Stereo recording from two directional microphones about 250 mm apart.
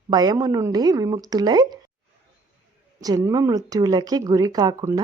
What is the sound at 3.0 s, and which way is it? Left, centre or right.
Speech, centre.